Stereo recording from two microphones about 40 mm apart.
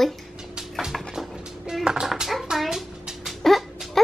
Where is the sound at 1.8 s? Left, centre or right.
Centre.